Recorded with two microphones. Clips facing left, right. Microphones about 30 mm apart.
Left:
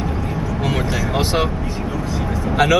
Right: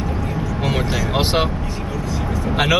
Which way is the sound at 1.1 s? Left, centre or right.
Right.